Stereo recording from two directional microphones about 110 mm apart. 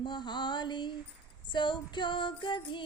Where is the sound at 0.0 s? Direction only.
45° left (ahead or behind).